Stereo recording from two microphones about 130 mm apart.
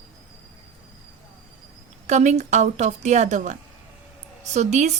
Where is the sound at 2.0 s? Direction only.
60° right (ahead or behind).